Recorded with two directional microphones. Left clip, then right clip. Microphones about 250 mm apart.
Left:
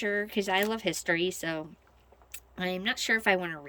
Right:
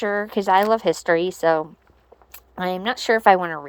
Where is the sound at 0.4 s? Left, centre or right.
Right.